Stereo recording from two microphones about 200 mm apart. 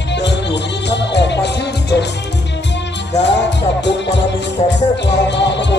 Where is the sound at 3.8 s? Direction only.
60° left (ahead or behind).